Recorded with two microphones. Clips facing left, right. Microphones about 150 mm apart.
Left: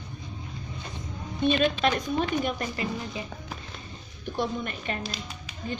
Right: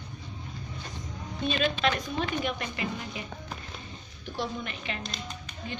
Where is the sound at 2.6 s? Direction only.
35° left (ahead or behind).